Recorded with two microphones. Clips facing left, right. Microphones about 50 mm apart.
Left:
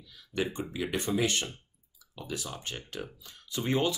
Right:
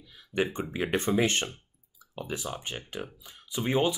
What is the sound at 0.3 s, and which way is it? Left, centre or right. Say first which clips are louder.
Speech: right 3 dB; right.